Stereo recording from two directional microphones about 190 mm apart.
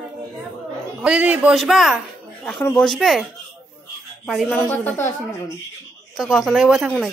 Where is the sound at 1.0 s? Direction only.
5° right (ahead or behind).